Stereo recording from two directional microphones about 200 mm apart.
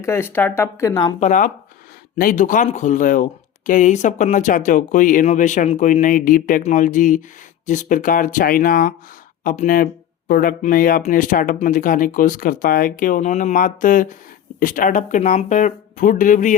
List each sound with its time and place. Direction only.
0.0 s speech: 10° left (ahead or behind)
1.2 s speech: 40° left (ahead or behind)